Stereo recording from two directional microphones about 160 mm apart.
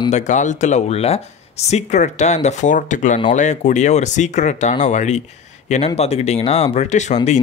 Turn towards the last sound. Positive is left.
turn(degrees=45)  # may be behind; listen again after turning